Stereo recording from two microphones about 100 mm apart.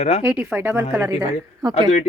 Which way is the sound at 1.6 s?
45° right (ahead or behind).